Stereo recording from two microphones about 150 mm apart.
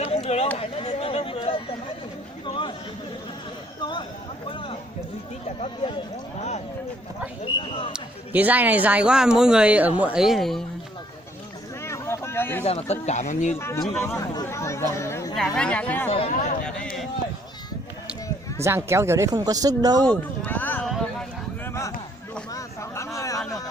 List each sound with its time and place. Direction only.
0.0 s a sound: 45° left (ahead or behind)
2.5 s chatter: 35° left (ahead or behind)
3.8 s a sound: 30° left (ahead or behind)
7.6 s speech: 40° left (ahead or behind)
7.9 s a man's voice: 10° right (ahead or behind)
11.8 s a sound: 20° left (ahead or behind)
12.6 s speech: 45° left (ahead or behind)
13.6 s speech: 15° left (ahead or behind)
15.5 s speech: 5° left (ahead or behind)
16.0 s speech: 40° left (ahead or behind)
16.6 s run: 5° left (ahead or behind)
18.6 s speech: 20° right (ahead or behind)
20.1 s a sound: 10° left (ahead or behind)